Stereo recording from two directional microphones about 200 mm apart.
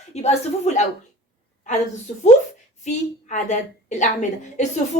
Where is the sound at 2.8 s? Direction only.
35° left (ahead or behind).